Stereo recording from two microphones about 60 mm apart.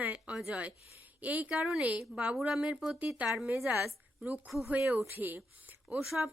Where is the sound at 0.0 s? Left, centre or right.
Right.